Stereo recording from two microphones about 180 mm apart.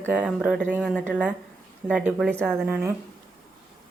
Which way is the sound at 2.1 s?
5° right (ahead or behind).